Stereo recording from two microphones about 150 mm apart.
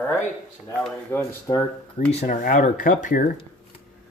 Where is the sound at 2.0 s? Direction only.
55° left (ahead or behind).